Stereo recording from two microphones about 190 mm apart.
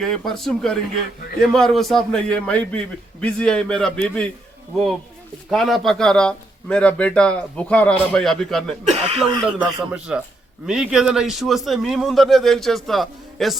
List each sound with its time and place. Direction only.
0.0 s a man's voice: centre (ahead or behind)
5.5 s a man's voice: centre (ahead or behind)
8.9 s speech: 35° right (ahead or behind)
9.6 s a man's voice: 5° right (ahead or behind)